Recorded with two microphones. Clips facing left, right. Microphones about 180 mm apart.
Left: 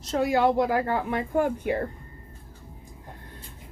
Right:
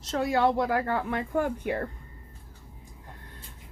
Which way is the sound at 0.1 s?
10° left (ahead or behind).